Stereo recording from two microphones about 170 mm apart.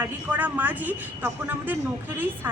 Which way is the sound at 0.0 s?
10° right (ahead or behind).